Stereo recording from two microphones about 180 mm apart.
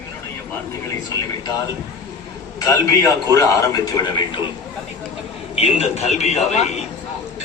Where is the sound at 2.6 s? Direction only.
15° left (ahead or behind).